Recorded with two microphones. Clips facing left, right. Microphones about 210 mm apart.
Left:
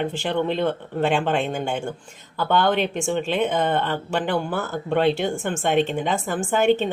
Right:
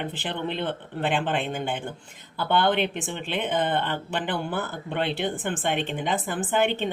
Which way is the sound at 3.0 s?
45° left (ahead or behind).